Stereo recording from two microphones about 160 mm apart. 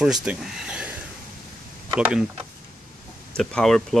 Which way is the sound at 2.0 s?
5° right (ahead or behind).